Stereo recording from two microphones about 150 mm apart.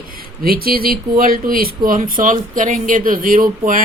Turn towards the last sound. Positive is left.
turn(degrees=-65)  # may be behind; listen again after turning